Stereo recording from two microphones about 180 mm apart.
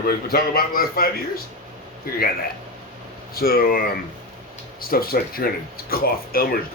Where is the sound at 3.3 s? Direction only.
55° left (ahead or behind).